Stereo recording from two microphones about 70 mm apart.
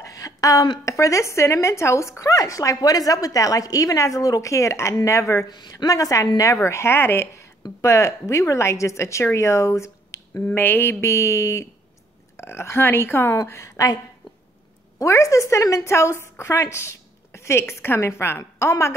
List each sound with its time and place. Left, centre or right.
0.1 s a woman's voice: left
5.8 s a woman's voice: left
10.4 s a woman's voice: left
15.0 s a woman's voice: left